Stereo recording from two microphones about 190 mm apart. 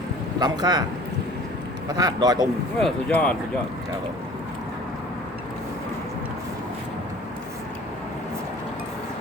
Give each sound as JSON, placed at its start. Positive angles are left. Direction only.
{"t": 0.3, "sound": "a man's voice", "side_deg": -20}
{"t": 1.9, "sound": "a man's voice", "side_deg": -20}
{"t": 2.8, "sound": "speech", "side_deg": 5}